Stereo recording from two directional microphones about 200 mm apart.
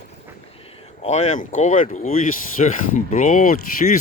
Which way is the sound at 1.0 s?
35° left (ahead or behind).